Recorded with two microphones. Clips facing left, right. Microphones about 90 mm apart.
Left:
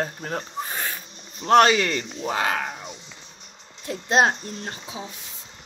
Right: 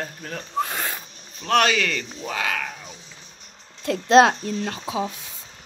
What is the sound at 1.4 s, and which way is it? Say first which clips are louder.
Speech: left 4 dB; 35° left (ahead or behind).